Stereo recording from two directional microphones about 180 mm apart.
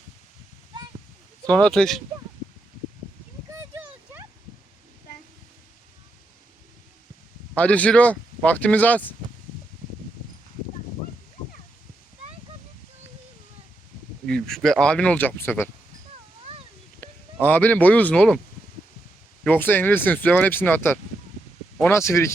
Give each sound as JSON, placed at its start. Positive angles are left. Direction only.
{"t": 1.5, "sound": "speech", "side_deg": 5}
{"t": 3.5, "sound": "a sound", "side_deg": -15}
{"t": 7.5, "sound": "speech", "side_deg": 10}
{"t": 14.3, "sound": "speech", "side_deg": 5}
{"t": 17.0, "sound": "speech", "side_deg": 10}
{"t": 19.5, "sound": "speech", "side_deg": 10}